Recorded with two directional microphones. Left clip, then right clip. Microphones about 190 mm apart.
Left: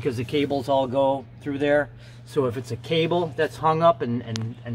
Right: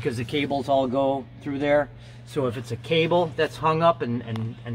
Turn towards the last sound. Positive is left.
turn(degrees=5)  # may be behind; listen again after turning